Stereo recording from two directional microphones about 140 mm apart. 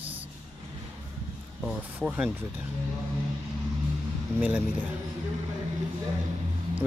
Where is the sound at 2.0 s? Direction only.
5° right (ahead or behind).